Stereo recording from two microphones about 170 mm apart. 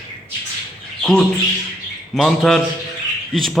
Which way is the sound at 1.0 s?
5° left (ahead or behind).